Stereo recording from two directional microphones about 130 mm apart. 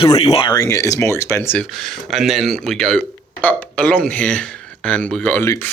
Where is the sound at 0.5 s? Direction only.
25° left (ahead or behind).